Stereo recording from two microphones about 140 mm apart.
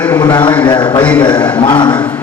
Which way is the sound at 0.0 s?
30° left (ahead or behind).